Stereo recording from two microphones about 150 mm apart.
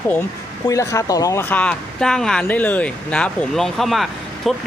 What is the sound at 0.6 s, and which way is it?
Speech, 20° left (ahead or behind).